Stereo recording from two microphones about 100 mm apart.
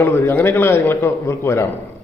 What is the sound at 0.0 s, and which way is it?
A man's voice, 20° left (ahead or behind).